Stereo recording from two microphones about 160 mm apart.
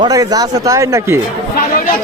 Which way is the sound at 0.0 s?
25° right (ahead or behind).